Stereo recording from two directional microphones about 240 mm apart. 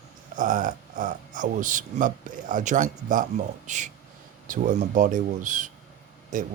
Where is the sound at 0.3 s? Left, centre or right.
Right.